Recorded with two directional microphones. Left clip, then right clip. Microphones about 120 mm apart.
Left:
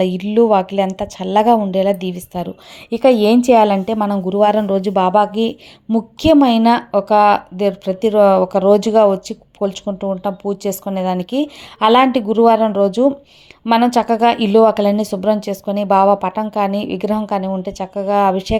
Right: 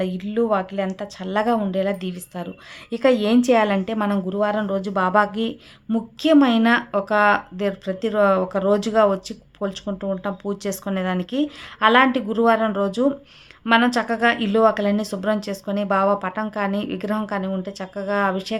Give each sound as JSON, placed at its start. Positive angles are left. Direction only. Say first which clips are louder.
{"t": 0.0, "sound": "a woman's voice", "louder": "left 9 dB", "side_deg": 45}
{"t": 4.4, "sound": "a woman's voice", "louder": "left 10 dB", "side_deg": 45}
{"t": 5.1, "sound": "speech", "louder": "left 2 dB", "side_deg": 15}
{"t": 5.4, "sound": "speech", "louder": "left 8 dB", "side_deg": 35}